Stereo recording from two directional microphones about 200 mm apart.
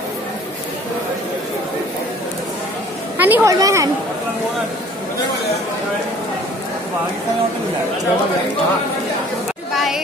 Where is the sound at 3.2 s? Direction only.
15° right (ahead or behind).